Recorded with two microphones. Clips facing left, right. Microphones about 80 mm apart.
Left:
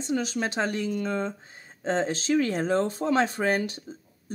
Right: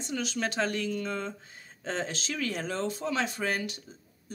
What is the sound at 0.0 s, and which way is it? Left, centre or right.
Speech, left.